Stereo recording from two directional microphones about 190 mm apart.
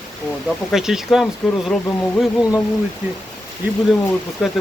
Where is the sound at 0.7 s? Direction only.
Centre (ahead or behind).